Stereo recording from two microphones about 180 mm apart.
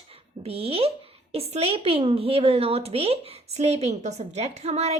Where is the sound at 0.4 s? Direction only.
35° right (ahead or behind).